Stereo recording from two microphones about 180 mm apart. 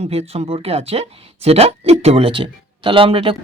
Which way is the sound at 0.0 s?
35° right (ahead or behind).